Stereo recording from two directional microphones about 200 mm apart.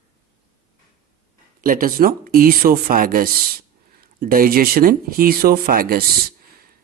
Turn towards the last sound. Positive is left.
turn(degrees=-45)  # may be behind; listen again after turning